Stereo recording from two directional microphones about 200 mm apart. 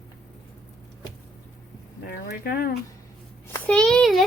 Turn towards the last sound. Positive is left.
turn(degrees=0)  # may be behind; listen again after turning